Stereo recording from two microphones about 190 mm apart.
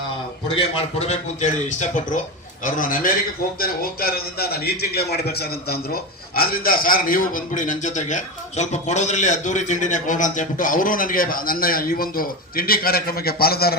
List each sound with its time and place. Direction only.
0.5 s a man's voice: 35° left (ahead or behind); by 13.7 s 55° left (ahead or behind)